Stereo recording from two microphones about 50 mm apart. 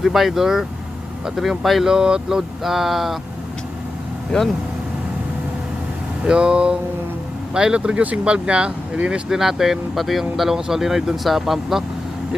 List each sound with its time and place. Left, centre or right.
0.0 s speech: centre
1.9 s speech: centre
2.6 s speech: centre
6.2 s speech: right
9.3 s speech: centre